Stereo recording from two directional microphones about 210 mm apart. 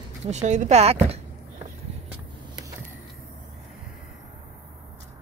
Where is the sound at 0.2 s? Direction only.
35° right (ahead or behind).